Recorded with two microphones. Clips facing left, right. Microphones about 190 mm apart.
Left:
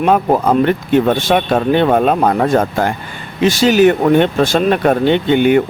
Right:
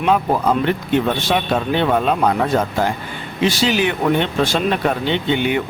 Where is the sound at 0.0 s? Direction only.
50° left (ahead or behind).